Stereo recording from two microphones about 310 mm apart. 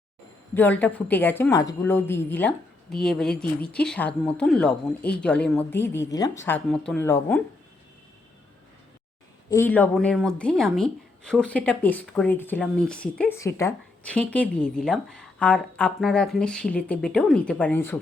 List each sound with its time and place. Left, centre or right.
0.5 s speech: centre
9.5 s speech: centre